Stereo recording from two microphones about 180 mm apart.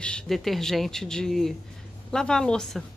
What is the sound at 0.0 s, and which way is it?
Speech, 5° left (ahead or behind).